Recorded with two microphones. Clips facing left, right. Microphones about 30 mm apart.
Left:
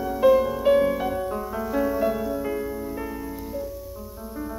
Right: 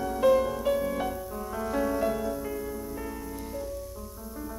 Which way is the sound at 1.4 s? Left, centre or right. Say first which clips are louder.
Even; centre.